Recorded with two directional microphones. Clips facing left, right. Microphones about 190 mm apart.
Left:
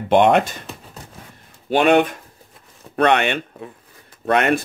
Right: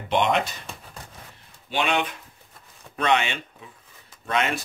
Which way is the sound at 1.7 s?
55° left (ahead or behind).